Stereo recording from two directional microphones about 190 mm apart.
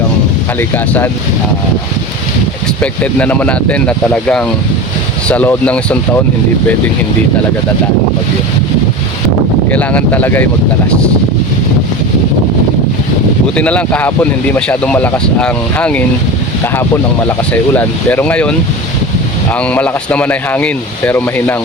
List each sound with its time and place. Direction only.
2.8 s speech: 5° left (ahead or behind)
9.6 s speech: 10° left (ahead or behind)
13.6 s speech: 5° left (ahead or behind)
17.2 s speech: 10° left (ahead or behind)